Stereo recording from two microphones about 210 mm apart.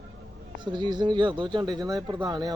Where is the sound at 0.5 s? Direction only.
20° right (ahead or behind).